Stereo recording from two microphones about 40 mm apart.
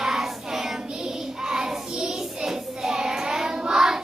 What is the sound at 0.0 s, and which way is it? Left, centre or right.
Child singing, centre.